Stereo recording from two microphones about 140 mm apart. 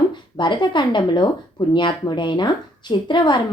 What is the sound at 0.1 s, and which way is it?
Speech, 35° left (ahead or behind).